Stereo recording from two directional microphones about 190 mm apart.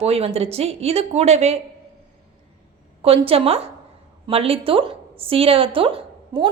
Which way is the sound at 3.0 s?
30° right (ahead or behind).